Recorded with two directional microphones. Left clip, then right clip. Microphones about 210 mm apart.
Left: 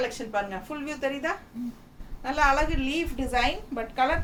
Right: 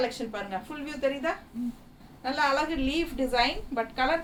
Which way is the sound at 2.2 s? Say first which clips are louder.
Left 3 dB; 10° left (ahead or behind).